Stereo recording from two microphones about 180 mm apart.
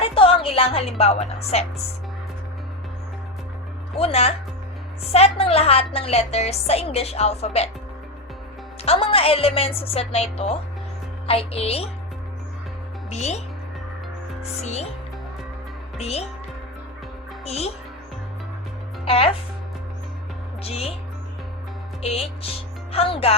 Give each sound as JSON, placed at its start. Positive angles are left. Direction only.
{"t": 0.0, "sound": "a woman's voice", "side_deg": 30}
{"t": 3.9, "sound": "a woman's voice", "side_deg": 35}
{"t": 8.8, "sound": "a woman's voice", "side_deg": 30}
{"t": 13.1, "sound": "speech", "side_deg": 40}
{"t": 14.6, "sound": "a woman's voice", "side_deg": 35}
{"t": 16.0, "sound": "music", "side_deg": 35}
{"t": 17.4, "sound": "a child's voice", "side_deg": 35}
{"t": 19.0, "sound": "a woman's voice", "side_deg": 30}
{"t": 20.7, "sound": "a woman's voice", "side_deg": 35}
{"t": 22.0, "sound": "speech", "side_deg": 35}